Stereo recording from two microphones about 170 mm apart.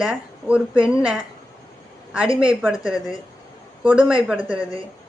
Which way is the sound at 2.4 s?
5° right (ahead or behind).